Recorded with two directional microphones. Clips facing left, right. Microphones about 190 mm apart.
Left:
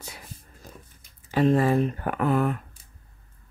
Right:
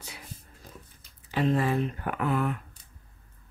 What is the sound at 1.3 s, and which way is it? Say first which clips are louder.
Speech: left 5 dB; 45° left (ahead or behind).